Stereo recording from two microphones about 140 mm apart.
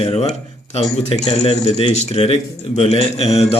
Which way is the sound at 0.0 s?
50° left (ahead or behind).